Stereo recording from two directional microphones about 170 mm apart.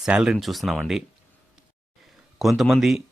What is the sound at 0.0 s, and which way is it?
Speech, 5° right (ahead or behind).